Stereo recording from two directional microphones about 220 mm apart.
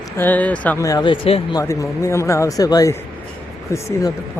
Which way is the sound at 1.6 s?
15° left (ahead or behind).